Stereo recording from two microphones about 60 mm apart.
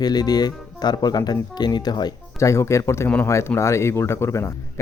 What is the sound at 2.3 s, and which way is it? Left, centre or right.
Speech, left.